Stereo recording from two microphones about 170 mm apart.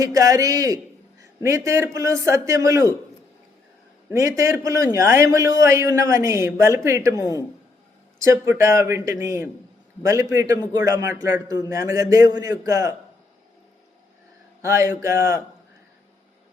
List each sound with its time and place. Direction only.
0.0 s a man's voice: 20° right (ahead or behind)
4.1 s a man's voice: 15° right (ahead or behind)
14.6 s a man's voice: 15° right (ahead or behind)